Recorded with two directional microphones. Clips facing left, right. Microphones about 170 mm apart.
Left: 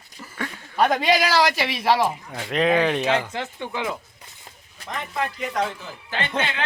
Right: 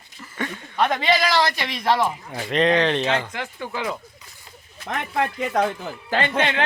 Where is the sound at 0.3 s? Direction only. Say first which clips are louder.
Left 1 dB; centre (ahead or behind).